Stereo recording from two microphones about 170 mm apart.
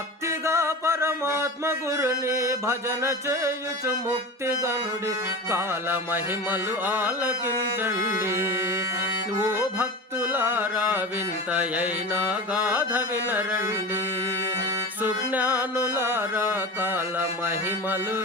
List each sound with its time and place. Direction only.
0.3 s music: 15° right (ahead or behind)
5.5 s music: 15° right (ahead or behind)
12.3 s music: 10° right (ahead or behind)
15.0 s music: 10° right (ahead or behind)